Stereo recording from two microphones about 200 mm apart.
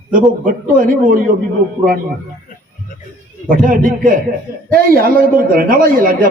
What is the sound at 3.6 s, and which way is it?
Speech, 40° right (ahead or behind).